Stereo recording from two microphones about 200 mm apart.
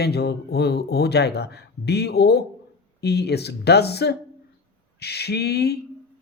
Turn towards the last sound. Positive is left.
turn(degrees=55)  # may be behind; listen again after turning